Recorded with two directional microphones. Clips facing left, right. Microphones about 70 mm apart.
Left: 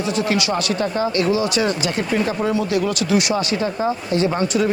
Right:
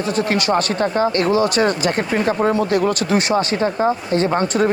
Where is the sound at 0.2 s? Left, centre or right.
Right.